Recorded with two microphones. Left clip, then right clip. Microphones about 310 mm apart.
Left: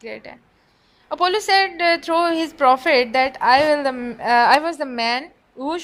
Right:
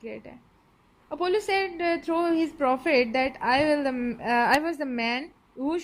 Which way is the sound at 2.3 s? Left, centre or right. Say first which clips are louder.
Left 9 dB; left.